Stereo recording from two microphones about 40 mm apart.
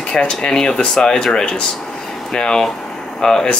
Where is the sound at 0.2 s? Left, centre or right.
Centre.